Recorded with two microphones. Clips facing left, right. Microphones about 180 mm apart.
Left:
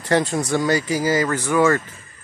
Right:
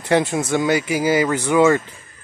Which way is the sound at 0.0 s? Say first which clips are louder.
Right 1 dB; 20° right (ahead or behind).